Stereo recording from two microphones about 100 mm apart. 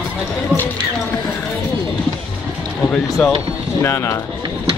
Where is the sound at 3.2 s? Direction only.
5° left (ahead or behind).